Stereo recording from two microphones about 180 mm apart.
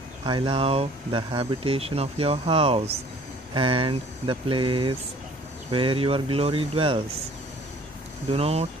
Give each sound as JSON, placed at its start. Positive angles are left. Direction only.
{"t": 0.2, "sound": "speech", "side_deg": -25}
{"t": 8.3, "sound": "speech", "side_deg": -35}